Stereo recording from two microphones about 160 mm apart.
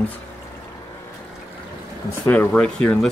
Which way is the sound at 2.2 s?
10° left (ahead or behind).